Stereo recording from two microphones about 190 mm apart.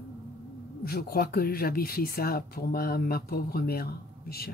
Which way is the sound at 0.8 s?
55° left (ahead or behind).